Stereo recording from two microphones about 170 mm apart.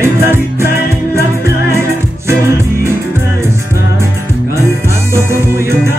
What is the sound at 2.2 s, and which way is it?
Music, 15° right (ahead or behind).